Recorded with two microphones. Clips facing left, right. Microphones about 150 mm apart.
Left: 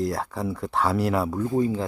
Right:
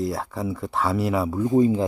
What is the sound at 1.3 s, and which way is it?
Speech, 20° right (ahead or behind).